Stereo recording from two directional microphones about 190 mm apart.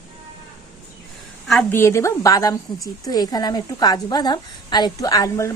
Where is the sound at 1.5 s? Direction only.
5° left (ahead or behind).